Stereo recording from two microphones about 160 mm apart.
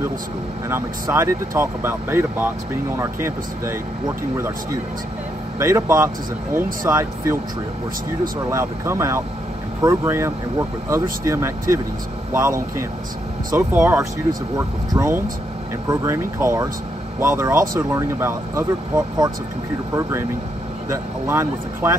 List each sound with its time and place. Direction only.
0.7 s speech: 15° right (ahead or behind)
5.6 s speech: 15° right (ahead or behind)
8.5 s speech: 15° right (ahead or behind)